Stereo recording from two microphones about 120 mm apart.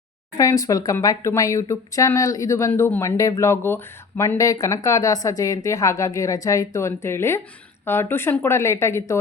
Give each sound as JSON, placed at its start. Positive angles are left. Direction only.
{"t": 0.3, "sound": "a woman's voice", "side_deg": 30}